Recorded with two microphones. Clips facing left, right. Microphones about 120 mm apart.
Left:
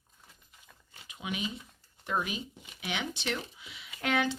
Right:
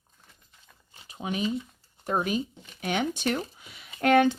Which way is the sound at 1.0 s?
40° right (ahead or behind).